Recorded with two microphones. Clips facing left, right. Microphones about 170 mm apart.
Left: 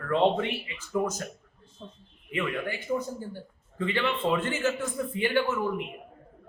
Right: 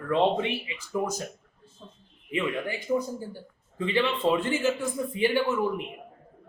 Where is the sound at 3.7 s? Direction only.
15° right (ahead or behind).